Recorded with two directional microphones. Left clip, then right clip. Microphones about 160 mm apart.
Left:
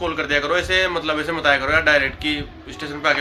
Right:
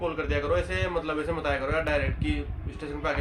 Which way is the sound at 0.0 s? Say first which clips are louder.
Left 8 dB; 15° right (ahead or behind).